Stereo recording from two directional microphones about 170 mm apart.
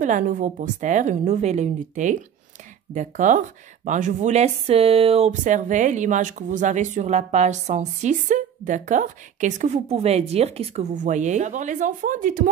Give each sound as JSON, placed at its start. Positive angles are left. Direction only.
{"t": 0.0, "sound": "speech", "side_deg": -50}